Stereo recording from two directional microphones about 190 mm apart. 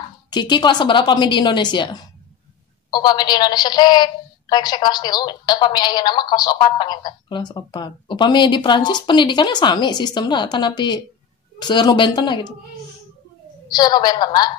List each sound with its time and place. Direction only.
0.3 s a woman's voice: 25° left (ahead or behind)
13.7 s a woman's voice: 20° left (ahead or behind)